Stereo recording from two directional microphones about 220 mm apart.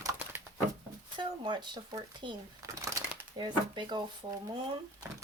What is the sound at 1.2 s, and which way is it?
Speech, 20° right (ahead or behind).